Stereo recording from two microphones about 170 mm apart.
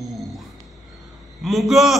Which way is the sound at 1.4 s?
Centre (ahead or behind).